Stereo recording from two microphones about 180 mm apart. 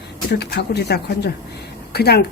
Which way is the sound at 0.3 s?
70° left (ahead or behind).